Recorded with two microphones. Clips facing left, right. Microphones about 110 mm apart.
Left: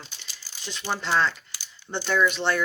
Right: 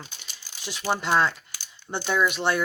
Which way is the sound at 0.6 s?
10° right (ahead or behind).